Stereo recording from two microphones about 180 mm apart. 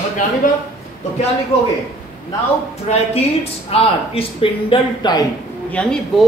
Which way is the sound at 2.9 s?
40° left (ahead or behind).